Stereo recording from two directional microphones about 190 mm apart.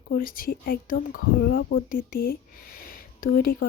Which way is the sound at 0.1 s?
50° left (ahead or behind).